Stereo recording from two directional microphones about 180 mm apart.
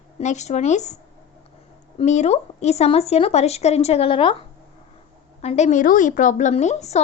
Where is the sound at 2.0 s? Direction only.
40° left (ahead or behind).